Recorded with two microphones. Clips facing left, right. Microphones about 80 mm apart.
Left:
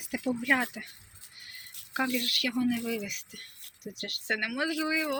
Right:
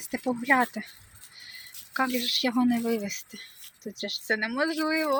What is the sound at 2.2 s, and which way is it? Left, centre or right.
Speech, right.